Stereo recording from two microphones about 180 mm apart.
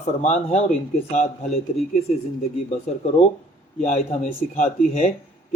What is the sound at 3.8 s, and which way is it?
Speech, 40° left (ahead or behind).